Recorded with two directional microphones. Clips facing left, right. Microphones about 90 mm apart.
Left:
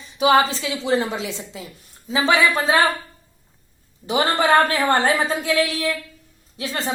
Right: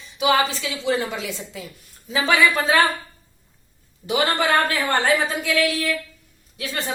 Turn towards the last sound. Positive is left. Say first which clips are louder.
# left 2 dB
turn(degrees=25)  # may be behind; listen again after turning